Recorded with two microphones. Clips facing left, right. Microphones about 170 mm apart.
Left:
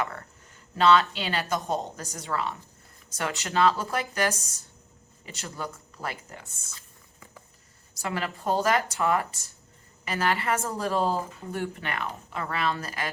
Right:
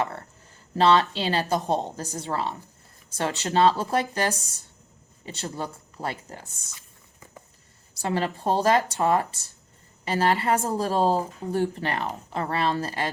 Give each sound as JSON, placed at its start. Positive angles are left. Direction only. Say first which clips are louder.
{"t": 0.0, "sound": "a sound", "louder": "right 3 dB", "side_deg": -30}
{"t": 0.8, "sound": "speech", "louder": "right 1 dB", "side_deg": -35}
{"t": 8.0, "sound": "speech", "louder": "right 4 dB", "side_deg": -30}